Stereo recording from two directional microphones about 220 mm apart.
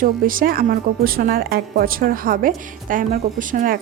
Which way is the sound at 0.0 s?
40° right (ahead or behind).